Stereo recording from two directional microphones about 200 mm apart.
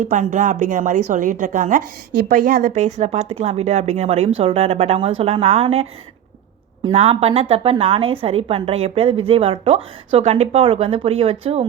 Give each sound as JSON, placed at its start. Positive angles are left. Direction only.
{"t": 0.0, "sound": "a woman's voice", "side_deg": -40}